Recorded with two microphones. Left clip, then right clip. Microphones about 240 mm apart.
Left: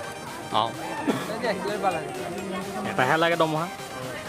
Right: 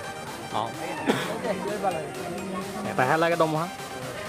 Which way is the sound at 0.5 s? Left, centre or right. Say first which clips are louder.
Left 5 dB; centre.